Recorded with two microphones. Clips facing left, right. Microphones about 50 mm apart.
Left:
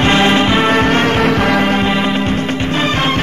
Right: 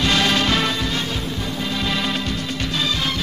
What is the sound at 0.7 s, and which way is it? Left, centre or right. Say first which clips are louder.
Music: left 12 dB; left.